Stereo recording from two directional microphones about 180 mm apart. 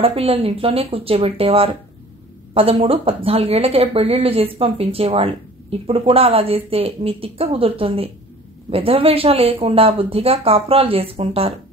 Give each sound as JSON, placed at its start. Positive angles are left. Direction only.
{"t": 0.0, "sound": "speech", "side_deg": -30}